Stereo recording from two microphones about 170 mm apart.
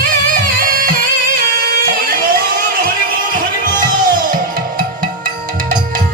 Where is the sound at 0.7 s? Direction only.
55° right (ahead or behind).